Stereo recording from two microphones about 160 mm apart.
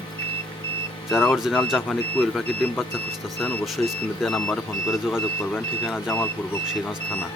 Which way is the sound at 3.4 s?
5° left (ahead or behind).